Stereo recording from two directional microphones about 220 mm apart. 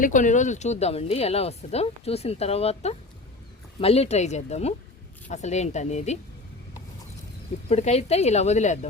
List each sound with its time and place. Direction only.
0.0 s a woman's voice: 35° left (ahead or behind)
7.7 s a woman's voice: 30° left (ahead or behind)